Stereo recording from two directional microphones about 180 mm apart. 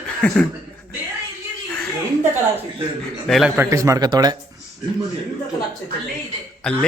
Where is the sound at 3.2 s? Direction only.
Centre (ahead or behind).